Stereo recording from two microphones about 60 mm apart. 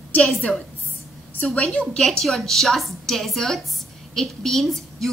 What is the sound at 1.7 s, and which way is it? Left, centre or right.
A woman's voice, centre.